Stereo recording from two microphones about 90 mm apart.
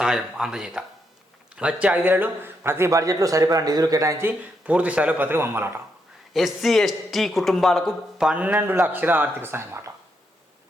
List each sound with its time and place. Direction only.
0.0 s a man's voice: 5° right (ahead or behind); by 4.4 s 30° right (ahead or behind)
4.6 s a man's voice: 15° right (ahead or behind)
6.3 s a man's voice: centre (ahead or behind)
8.3 s speech: 15° right (ahead or behind)